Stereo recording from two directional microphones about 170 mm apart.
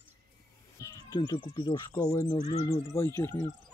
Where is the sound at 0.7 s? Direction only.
20° left (ahead or behind).